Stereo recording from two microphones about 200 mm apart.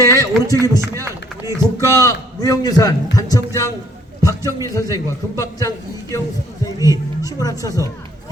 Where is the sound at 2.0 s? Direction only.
15° left (ahead or behind).